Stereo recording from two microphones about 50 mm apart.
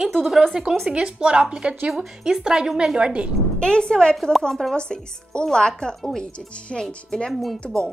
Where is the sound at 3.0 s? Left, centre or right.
Right.